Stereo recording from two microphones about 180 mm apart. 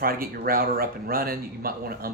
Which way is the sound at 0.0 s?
55° right (ahead or behind).